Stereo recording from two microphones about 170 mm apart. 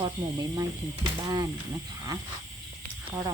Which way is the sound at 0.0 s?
25° right (ahead or behind).